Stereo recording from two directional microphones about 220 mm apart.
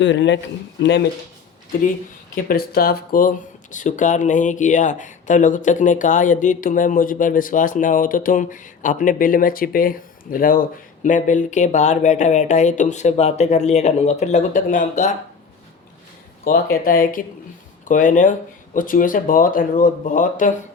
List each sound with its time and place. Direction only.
0.0 s speech: 55° left (ahead or behind)
2.3 s speech: 40° left (ahead or behind)
16.7 s speech: 40° left (ahead or behind)